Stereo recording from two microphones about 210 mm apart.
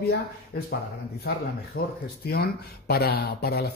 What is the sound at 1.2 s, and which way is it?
Speech, 45° left (ahead or behind).